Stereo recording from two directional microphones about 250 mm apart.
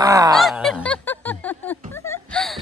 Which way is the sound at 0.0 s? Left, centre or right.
Centre.